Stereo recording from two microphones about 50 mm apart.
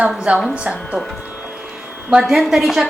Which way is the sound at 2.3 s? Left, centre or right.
Centre.